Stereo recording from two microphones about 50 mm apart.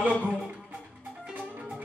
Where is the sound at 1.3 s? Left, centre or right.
Centre.